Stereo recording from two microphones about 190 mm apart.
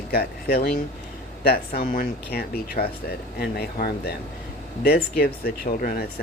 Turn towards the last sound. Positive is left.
turn(degrees=45)  # may be behind; listen again after turning